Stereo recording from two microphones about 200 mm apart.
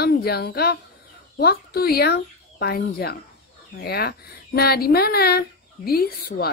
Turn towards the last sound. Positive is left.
turn(degrees=50)  # may be behind; listen again after turning